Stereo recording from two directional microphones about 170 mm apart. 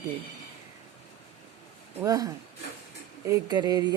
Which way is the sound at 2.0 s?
20° right (ahead or behind).